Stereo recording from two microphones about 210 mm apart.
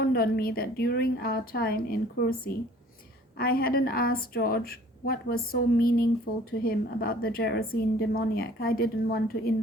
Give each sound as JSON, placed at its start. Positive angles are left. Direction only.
{"t": 0.0, "sound": "a woman's voice", "side_deg": 45}
{"t": 3.3, "sound": "a woman's voice", "side_deg": 45}